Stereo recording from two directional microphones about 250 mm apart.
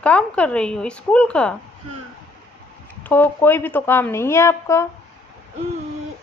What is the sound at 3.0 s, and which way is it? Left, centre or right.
A woman's voice, centre.